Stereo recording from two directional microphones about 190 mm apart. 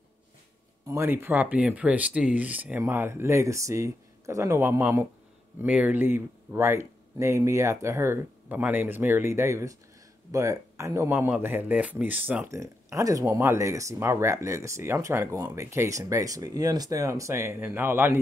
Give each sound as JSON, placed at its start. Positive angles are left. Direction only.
{"t": 0.8, "sound": "speech", "side_deg": -15}